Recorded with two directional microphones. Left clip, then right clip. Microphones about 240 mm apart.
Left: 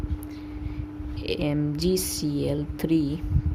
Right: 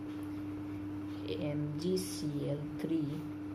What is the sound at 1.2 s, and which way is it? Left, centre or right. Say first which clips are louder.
Speech: left 12 dB; left.